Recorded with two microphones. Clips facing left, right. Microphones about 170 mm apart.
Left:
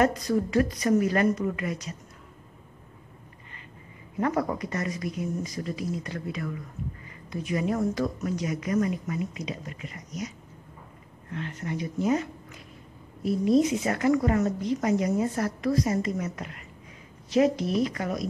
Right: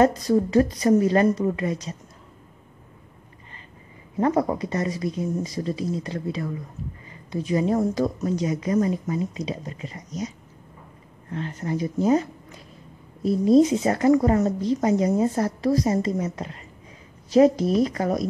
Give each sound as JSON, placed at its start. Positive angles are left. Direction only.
{"t": 0.0, "sound": "speech", "side_deg": -30}
{"t": 4.2, "sound": "a woman's voice", "side_deg": -30}